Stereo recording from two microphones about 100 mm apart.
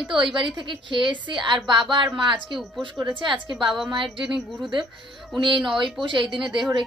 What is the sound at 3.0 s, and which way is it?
Speech, 15° right (ahead or behind).